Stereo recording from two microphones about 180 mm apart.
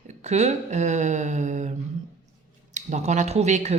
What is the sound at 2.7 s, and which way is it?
A woman's voice, 40° right (ahead or behind).